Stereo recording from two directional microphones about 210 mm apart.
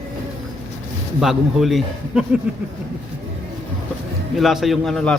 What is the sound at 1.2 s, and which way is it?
A man's voice, centre (ahead or behind).